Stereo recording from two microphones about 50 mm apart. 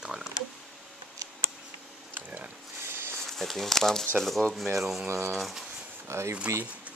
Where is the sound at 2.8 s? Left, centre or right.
Right.